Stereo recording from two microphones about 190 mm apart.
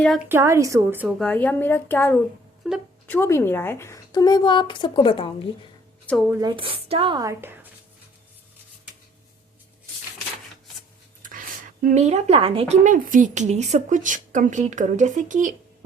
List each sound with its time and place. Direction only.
0.0 s a woman's voice: centre (ahead or behind)
0.3 s a woman's voice: 15° right (ahead or behind)
1.2 s a woman's voice: 5° left (ahead or behind)
2.6 s speech: centre (ahead or behind)
3.1 s a woman's voice: 15° left (ahead or behind)
6.1 s speech: centre (ahead or behind)
6.6 s speech: 30° right (ahead or behind); by 7.7 s 15° right (ahead or behind)
11.2 s speech: 45° right (ahead or behind)